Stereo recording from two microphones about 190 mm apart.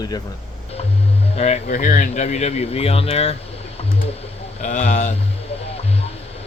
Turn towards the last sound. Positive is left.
turn(degrees=30)  # may be behind; listen again after turning